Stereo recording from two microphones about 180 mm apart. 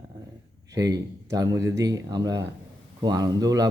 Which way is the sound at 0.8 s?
20° right (ahead or behind).